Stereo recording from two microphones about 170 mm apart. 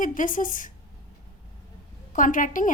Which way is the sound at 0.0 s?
50° left (ahead or behind).